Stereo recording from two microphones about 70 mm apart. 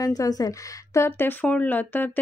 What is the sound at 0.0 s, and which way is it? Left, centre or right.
Speech, left.